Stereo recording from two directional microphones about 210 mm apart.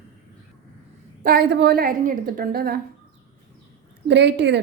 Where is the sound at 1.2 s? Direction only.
45° right (ahead or behind).